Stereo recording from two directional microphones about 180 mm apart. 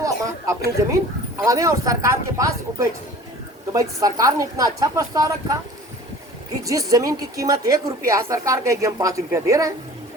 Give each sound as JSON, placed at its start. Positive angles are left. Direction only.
{"t": 0.0, "sound": "a woman's voice", "side_deg": -15}
{"t": 6.7, "sound": "a woman's voice", "side_deg": -20}